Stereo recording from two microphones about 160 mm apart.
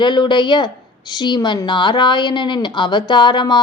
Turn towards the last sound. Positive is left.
turn(degrees=30)  # may be behind; listen again after turning